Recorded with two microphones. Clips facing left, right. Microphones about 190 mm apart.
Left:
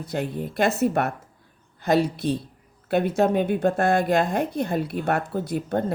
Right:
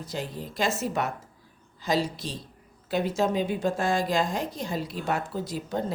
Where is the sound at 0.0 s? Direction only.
60° left (ahead or behind).